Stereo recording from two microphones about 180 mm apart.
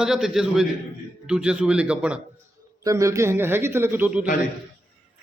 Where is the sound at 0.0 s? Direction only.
5° right (ahead or behind).